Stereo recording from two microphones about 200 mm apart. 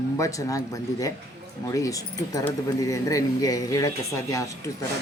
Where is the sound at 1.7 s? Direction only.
15° left (ahead or behind).